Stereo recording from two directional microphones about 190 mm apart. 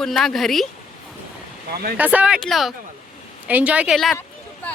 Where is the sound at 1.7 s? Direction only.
55° right (ahead or behind).